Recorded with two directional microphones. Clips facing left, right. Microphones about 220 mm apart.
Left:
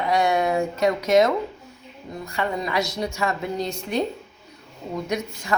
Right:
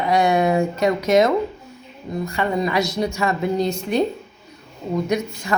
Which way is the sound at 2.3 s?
15° right (ahead or behind).